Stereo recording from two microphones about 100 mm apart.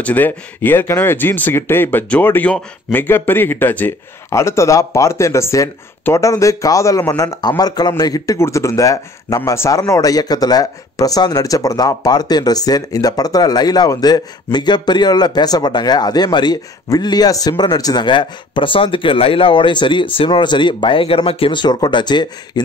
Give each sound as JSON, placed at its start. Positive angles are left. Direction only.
{"t": 0.0, "sound": "a man's voice", "side_deg": 15}